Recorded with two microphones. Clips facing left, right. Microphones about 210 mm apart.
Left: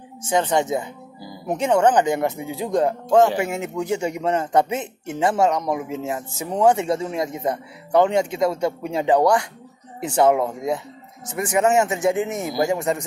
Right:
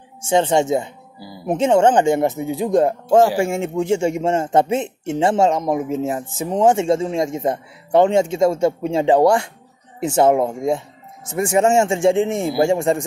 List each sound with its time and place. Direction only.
0.2 s a man's voice: 25° right (ahead or behind)